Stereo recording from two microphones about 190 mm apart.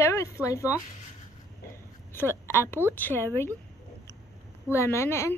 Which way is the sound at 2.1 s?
10° left (ahead or behind).